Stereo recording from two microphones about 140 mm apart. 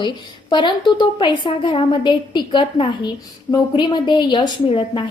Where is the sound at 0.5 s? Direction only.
35° left (ahead or behind).